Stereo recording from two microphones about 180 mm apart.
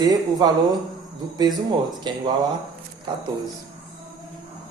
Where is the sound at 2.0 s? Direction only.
25° right (ahead or behind).